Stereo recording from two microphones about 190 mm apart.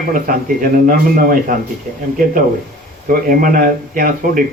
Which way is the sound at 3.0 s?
50° right (ahead or behind).